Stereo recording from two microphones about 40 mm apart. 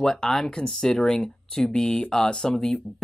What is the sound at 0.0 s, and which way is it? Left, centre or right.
Speech, centre.